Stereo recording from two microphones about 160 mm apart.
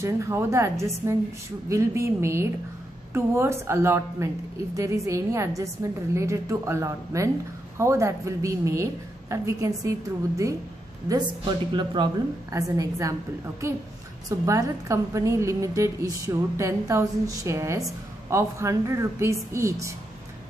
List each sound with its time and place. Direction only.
0.0 s a woman's voice: 15° right (ahead or behind)
14.4 s a woman's voice: 20° right (ahead or behind)